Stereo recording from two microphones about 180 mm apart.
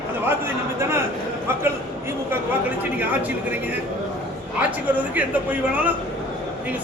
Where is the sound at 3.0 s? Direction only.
10° right (ahead or behind).